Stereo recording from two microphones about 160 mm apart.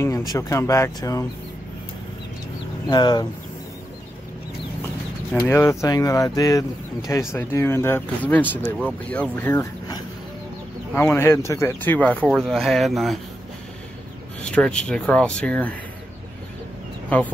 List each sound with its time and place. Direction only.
0.3 s speech: 20° left (ahead or behind)
2.9 s speech: 25° left (ahead or behind)
5.5 s speech: 15° left (ahead or behind)
12.2 s speech: 5° right (ahead or behind)
14.4 s speech: 5° left (ahead or behind)